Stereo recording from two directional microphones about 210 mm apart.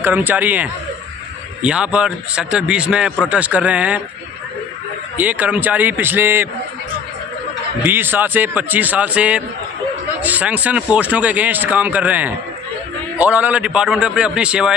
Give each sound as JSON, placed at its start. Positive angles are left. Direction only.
{"t": 0.0, "sound": "a man's voice", "side_deg": -10}
{"t": 5.1, "sound": "speech", "side_deg": -10}
{"t": 7.8, "sound": "a man's voice", "side_deg": -10}